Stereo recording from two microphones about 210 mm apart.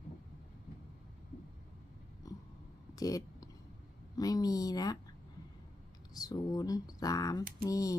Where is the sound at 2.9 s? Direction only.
15° left (ahead or behind).